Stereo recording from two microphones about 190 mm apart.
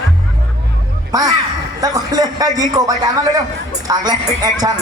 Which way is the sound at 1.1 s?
20° right (ahead or behind).